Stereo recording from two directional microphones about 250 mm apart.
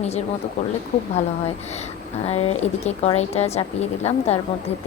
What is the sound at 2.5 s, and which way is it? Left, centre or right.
A woman's voice, left.